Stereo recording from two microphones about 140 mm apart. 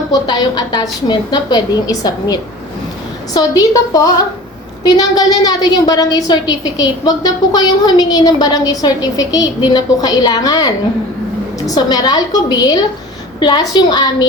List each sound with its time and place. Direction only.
0.1 s a woman's voice: 30° left (ahead or behind)